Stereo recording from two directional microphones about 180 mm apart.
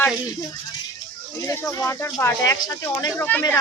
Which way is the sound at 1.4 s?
15° left (ahead or behind).